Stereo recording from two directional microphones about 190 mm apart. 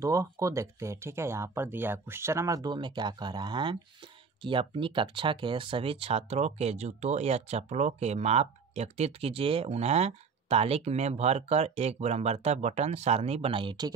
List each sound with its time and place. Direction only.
0.0 s speech: 15° right (ahead or behind)